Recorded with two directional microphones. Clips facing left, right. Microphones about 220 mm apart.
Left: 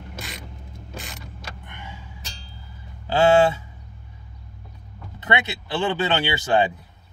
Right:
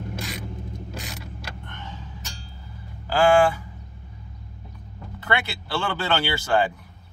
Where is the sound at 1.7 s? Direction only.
10° left (ahead or behind).